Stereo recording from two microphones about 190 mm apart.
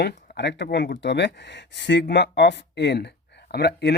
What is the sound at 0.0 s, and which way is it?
Speech, 60° left (ahead or behind).